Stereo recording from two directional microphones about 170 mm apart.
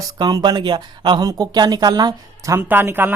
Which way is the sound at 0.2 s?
25° right (ahead or behind).